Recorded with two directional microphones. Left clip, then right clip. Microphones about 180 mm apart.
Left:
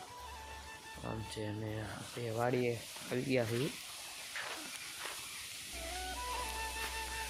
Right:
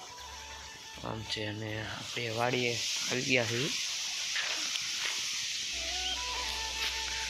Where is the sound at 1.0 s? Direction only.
15° right (ahead or behind).